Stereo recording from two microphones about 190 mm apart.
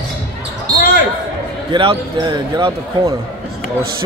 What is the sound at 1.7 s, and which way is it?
Speech, 25° right (ahead or behind).